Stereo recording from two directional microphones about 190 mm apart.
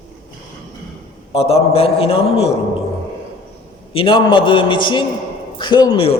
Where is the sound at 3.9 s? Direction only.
30° left (ahead or behind).